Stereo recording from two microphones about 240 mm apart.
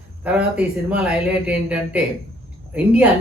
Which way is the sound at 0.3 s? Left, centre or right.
Centre.